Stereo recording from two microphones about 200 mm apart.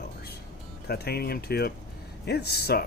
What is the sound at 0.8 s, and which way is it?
Speech, 50° left (ahead or behind).